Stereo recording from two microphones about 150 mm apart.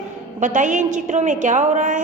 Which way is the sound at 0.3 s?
55° right (ahead or behind).